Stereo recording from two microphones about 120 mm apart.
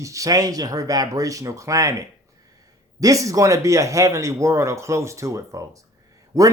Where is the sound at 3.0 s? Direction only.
30° right (ahead or behind).